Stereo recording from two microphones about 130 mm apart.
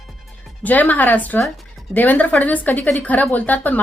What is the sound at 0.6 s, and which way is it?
A woman's voice, 15° left (ahead or behind).